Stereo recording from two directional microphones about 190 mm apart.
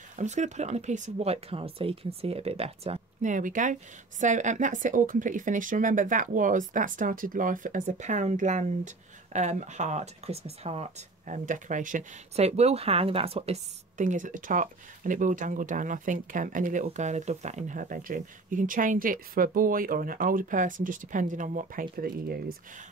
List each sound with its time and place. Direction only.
0.1 s speech: 40° right (ahead or behind)